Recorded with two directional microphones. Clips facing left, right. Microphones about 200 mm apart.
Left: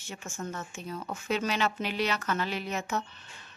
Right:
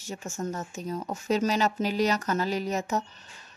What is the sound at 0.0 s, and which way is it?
Speech, 40° right (ahead or behind).